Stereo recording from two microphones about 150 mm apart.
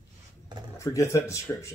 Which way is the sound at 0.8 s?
20° left (ahead or behind).